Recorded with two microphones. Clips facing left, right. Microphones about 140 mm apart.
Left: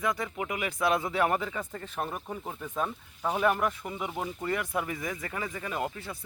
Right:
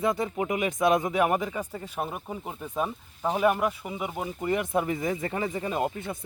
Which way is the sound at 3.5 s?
10° right (ahead or behind).